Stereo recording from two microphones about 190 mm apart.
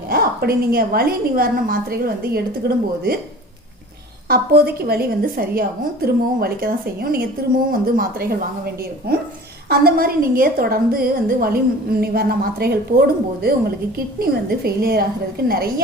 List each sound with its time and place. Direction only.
0.1 s a woman's voice: 50° right (ahead or behind)
4.3 s a woman's voice: 55° right (ahead or behind)